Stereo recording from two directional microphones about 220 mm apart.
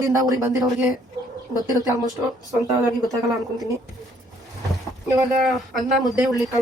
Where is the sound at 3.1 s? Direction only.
15° right (ahead or behind).